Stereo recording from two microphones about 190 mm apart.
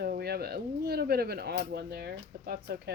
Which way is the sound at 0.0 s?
55° right (ahead or behind).